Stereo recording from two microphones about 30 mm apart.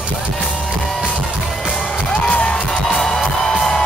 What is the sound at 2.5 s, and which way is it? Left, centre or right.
Music, centre.